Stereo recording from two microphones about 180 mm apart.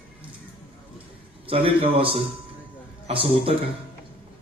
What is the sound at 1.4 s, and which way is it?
Speech, 30° right (ahead or behind).